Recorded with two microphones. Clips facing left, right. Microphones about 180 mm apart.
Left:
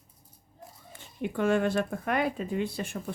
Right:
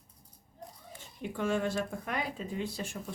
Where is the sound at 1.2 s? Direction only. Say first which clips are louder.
Left 6 dB; 60° left (ahead or behind).